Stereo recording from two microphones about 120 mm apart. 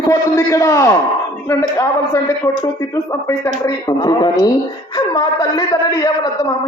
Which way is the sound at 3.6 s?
30° left (ahead or behind).